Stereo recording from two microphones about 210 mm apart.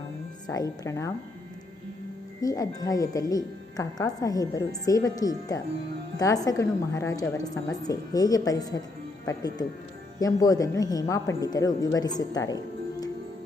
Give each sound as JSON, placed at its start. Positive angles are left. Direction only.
{"t": 0.4, "sound": "speech", "side_deg": 15}
{"t": 2.4, "sound": "speech", "side_deg": 15}